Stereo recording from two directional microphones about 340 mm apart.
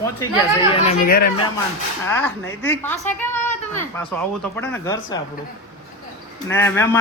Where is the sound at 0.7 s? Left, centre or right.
Left.